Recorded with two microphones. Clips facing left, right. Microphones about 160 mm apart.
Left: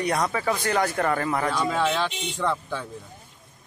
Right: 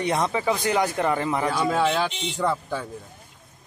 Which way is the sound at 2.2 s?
5° right (ahead or behind).